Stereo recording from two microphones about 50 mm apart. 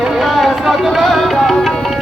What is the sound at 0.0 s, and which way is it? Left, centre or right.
Music, centre.